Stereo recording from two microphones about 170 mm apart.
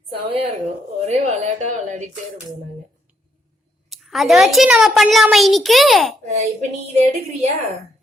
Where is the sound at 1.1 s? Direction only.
45° right (ahead or behind).